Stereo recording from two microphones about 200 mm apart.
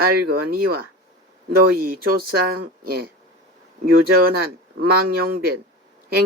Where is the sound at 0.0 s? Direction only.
50° right (ahead or behind).